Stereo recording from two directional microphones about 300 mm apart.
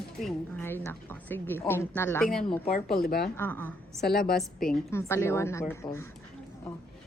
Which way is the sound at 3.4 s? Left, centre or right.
Centre.